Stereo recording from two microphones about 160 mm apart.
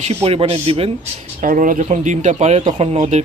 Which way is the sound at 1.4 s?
55° right (ahead or behind).